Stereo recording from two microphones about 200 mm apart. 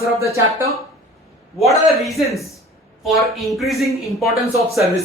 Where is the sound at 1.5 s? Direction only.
Centre (ahead or behind).